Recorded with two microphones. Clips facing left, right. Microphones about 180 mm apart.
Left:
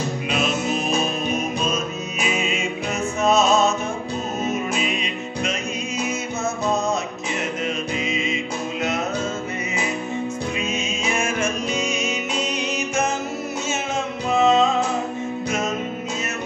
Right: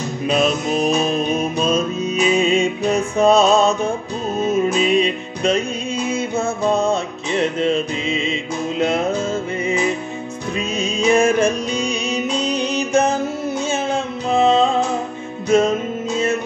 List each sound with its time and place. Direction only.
0.3 s music: 35° right (ahead or behind)
10.8 s music: 35° right (ahead or behind)
14.3 s music: 30° right (ahead or behind)